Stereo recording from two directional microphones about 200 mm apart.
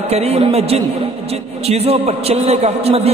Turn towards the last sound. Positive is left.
turn(degrees=-30)  # may be behind; listen again after turning